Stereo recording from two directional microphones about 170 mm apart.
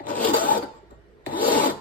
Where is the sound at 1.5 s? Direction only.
50° left (ahead or behind).